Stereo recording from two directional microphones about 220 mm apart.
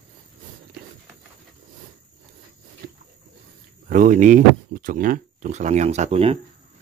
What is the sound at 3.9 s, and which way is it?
Speech, 35° right (ahead or behind).